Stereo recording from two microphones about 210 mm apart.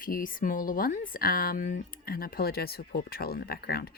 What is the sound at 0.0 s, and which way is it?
Speech, 40° left (ahead or behind).